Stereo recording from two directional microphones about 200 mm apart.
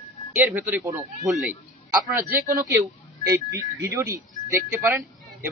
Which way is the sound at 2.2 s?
45° right (ahead or behind).